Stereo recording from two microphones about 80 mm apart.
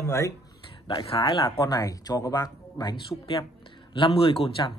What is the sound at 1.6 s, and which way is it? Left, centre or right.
Speech, left.